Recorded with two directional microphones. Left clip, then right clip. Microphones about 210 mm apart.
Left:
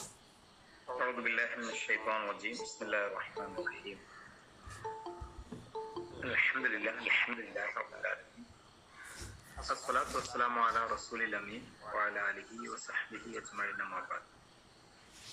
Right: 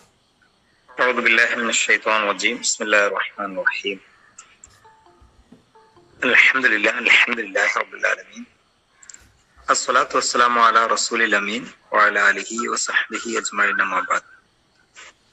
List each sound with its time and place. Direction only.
0.9 s a man's voice: 50° right (ahead or behind)
6.1 s a man's voice: 50° right (ahead or behind)
9.6 s a man's voice: 50° right (ahead or behind)